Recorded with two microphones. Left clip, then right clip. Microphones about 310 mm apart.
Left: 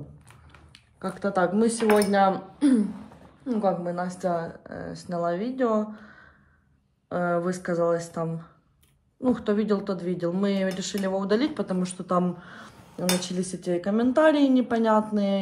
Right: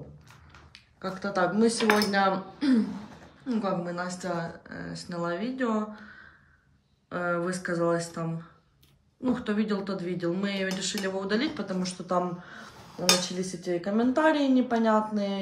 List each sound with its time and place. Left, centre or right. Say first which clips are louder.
0.5 s cutlery: right 1 dB; left
3.4 s speech: left 5 dB; centre